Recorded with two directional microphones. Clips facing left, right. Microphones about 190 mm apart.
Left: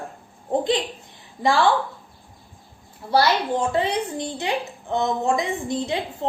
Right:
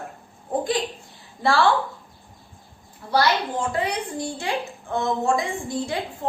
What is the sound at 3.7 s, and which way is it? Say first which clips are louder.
A woman's voice: left 3 dB; 25° left (ahead or behind).